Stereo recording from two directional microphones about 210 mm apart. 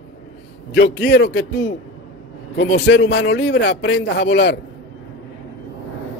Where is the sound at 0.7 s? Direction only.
55° left (ahead or behind).